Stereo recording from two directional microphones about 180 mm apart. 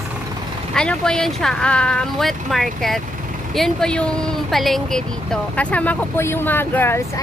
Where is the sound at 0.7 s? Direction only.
5° left (ahead or behind).